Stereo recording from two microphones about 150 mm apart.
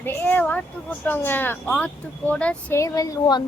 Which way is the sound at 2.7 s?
20° left (ahead or behind).